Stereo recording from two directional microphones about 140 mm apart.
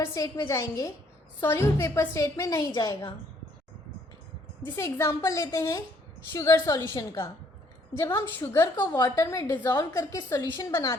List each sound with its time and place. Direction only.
0.0 s a woman's voice: 20° left (ahead or behind)
4.7 s a woman's voice: 25° left (ahead or behind)